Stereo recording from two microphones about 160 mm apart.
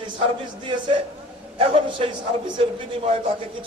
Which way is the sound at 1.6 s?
35° right (ahead or behind).